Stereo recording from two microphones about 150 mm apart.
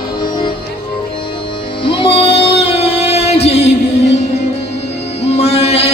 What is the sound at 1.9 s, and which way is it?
Music, 35° left (ahead or behind).